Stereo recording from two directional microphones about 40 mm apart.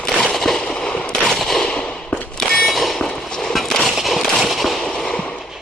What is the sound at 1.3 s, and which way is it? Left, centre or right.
Machine gun, centre.